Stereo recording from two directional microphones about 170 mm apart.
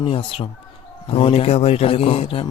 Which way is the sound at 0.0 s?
35° left (ahead or behind).